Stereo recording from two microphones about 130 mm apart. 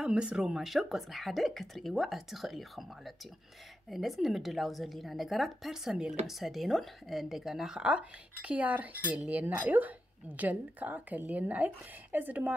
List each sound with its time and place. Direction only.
0.0 s speech: 10° right (ahead or behind)
3.9 s speech: centre (ahead or behind)